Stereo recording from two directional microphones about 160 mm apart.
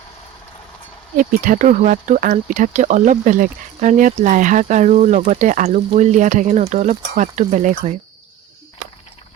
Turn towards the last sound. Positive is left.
turn(degrees=-50)  # may be behind; listen again after turning